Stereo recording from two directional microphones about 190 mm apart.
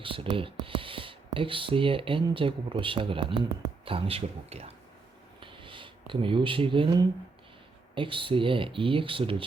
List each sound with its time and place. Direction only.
0.0 s speech: 25° right (ahead or behind)
5.4 s a sound: 25° right (ahead or behind)
7.9 s speech: 25° right (ahead or behind)